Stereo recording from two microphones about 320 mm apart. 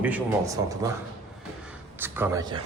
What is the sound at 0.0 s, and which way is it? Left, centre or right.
Speech, centre.